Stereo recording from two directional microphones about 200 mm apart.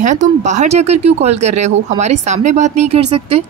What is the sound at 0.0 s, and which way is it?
Speech, 35° right (ahead or behind).